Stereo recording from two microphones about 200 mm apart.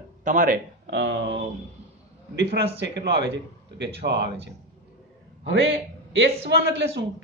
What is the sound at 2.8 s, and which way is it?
A man's voice, 60° right (ahead or behind).